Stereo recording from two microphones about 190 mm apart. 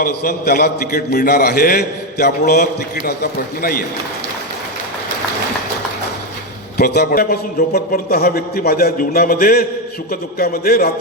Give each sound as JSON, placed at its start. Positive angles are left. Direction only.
{"t": 0.0, "sound": "a man's voice", "side_deg": 50}
{"t": 6.7, "sound": "a man's voice", "side_deg": 55}